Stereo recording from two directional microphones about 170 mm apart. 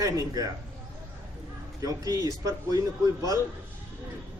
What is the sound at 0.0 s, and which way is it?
Speech, 20° right (ahead or behind).